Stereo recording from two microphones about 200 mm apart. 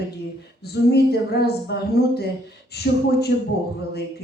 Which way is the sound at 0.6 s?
55° left (ahead or behind).